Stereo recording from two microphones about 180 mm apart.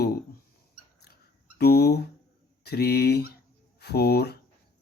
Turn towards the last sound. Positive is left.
turn(degrees=60)  # may be behind; listen again after turning